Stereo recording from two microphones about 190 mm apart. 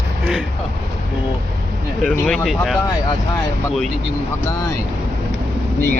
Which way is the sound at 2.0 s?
10° left (ahead or behind).